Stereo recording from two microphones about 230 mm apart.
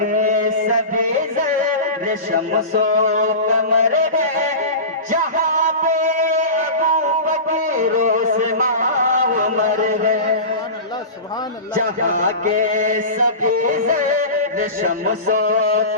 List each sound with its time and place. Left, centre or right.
0.0 s chant: right
0.9 s music: right
11.7 s music: right